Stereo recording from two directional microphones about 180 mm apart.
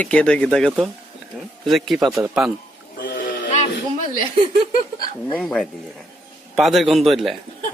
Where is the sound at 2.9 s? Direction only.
60° left (ahead or behind).